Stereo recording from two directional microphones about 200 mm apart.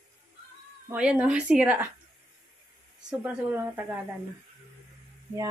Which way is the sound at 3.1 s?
5° right (ahead or behind).